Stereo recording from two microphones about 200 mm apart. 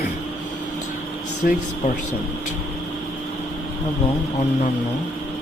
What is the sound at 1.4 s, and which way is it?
Speech, 50° left (ahead or behind).